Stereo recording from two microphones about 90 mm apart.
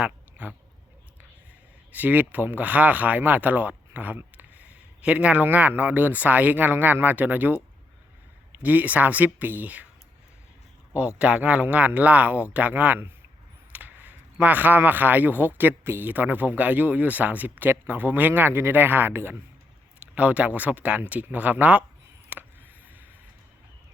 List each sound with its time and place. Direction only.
0.0 s a sound: 15° right (ahead or behind)
1.9 s speech: 20° right (ahead or behind)
11.2 s speech: 15° right (ahead or behind)